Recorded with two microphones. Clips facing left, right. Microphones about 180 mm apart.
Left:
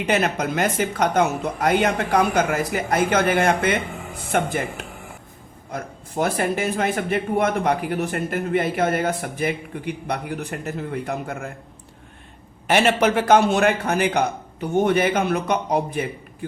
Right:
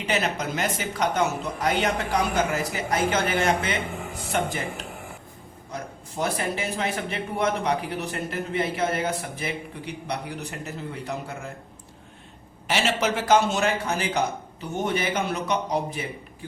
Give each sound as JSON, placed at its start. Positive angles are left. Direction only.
{"t": 0.0, "sound": "a man's voice", "side_deg": 50}
{"t": 12.6, "sound": "a man's voice", "side_deg": 55}